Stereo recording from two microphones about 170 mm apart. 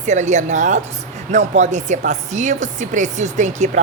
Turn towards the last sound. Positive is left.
turn(degrees=-45)  # may be behind; listen again after turning